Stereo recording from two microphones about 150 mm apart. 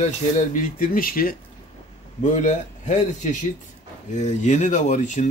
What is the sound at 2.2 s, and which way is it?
Speech, 55° left (ahead or behind).